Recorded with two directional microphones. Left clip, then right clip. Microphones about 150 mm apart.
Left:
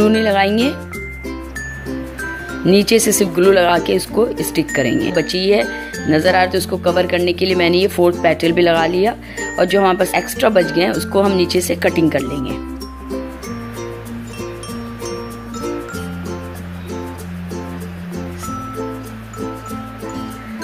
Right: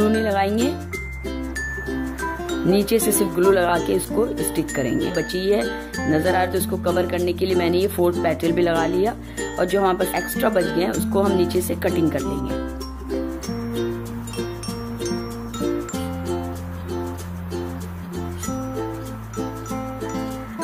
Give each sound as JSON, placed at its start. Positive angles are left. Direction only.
{"t": 0.0, "sound": "speech", "side_deg": 20}
{"t": 2.6, "sound": "speech", "side_deg": 15}